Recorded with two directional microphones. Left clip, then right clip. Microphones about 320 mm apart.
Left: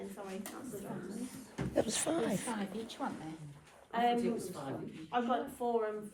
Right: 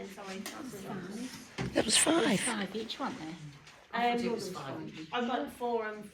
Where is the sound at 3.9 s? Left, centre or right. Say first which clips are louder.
Right 1 dB; left.